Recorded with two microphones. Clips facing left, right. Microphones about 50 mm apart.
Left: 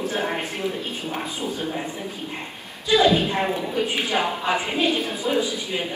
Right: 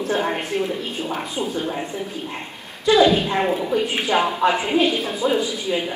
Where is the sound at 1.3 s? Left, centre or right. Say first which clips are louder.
Right 3 dB; right.